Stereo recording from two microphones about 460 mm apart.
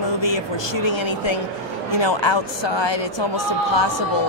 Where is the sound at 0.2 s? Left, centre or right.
Left.